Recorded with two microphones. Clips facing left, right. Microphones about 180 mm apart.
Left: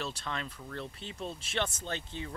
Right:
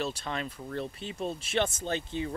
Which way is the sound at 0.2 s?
10° right (ahead or behind).